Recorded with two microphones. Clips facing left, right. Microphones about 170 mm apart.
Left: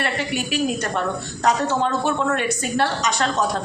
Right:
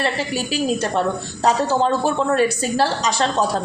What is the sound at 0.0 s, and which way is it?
A man's voice, 30° right (ahead or behind).